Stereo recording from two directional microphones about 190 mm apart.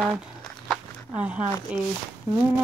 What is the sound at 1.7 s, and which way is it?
Speech, 5° right (ahead or behind).